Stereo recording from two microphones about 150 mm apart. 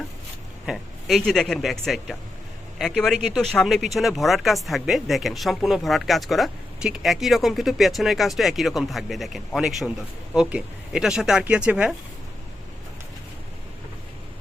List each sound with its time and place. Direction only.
0.6 s speech: centre (ahead or behind)